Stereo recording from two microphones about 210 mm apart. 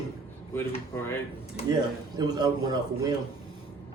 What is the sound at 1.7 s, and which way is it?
A man's voice, 20° right (ahead or behind).